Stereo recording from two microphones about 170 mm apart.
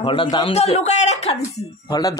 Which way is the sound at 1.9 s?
20° left (ahead or behind).